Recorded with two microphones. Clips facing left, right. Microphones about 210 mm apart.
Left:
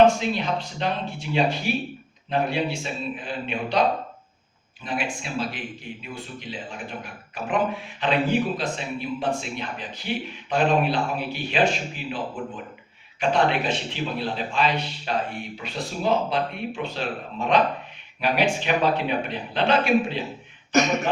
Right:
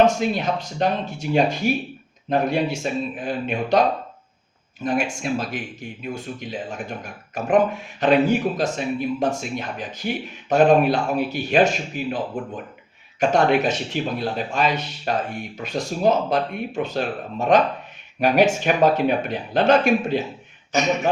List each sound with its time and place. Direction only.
0.0 s speech: 45° right (ahead or behind)
13.1 s speech: 45° right (ahead or behind)